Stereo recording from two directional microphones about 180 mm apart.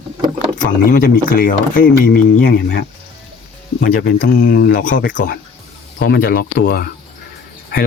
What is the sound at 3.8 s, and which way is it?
Speech, 55° left (ahead or behind).